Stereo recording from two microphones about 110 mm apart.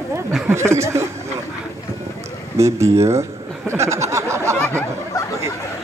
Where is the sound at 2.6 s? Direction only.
25° right (ahead or behind).